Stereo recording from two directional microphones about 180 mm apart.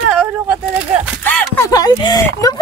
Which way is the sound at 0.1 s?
5° right (ahead or behind).